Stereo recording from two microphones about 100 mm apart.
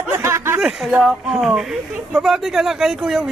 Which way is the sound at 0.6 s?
5° right (ahead or behind).